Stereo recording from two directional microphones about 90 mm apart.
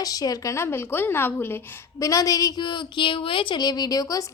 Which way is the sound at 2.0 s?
40° left (ahead or behind).